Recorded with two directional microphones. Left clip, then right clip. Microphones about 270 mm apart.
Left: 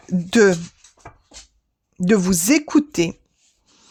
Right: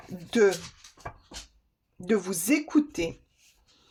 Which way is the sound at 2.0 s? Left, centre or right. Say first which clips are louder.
Left 9 dB; left.